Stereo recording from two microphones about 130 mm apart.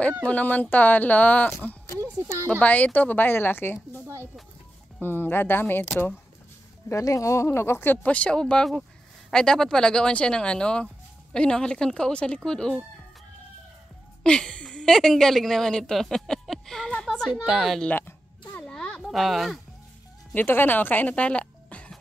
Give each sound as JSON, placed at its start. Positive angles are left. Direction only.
{"t": 0.2, "sound": "speech", "side_deg": 10}
{"t": 2.0, "sound": "a sound", "side_deg": -20}
{"t": 2.6, "sound": "speech", "side_deg": 10}
{"t": 4.0, "sound": "a sound", "side_deg": -20}
{"t": 5.0, "sound": "a woman's voice", "side_deg": 15}
{"t": 14.2, "sound": "a woman's voice", "side_deg": 5}
{"t": 17.3, "sound": "a woman's voice", "side_deg": -10}
{"t": 17.9, "sound": "music", "side_deg": 15}
{"t": 18.6, "sound": "a sound", "side_deg": 5}
{"t": 20.3, "sound": "speech", "side_deg": 15}